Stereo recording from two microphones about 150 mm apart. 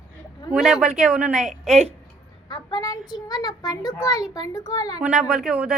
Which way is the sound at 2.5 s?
25° left (ahead or behind).